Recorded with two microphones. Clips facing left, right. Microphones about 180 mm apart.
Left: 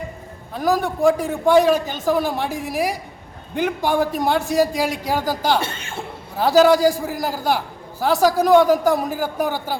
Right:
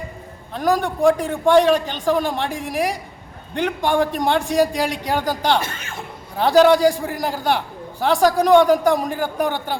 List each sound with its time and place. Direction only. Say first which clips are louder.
0.5 s a man's voice: even; 5° left (ahead or behind)
5.6 s chuckle: left 1 dB; 30° left (ahead or behind)
6.3 s a man's voice: right 1 dB; 5° left (ahead or behind)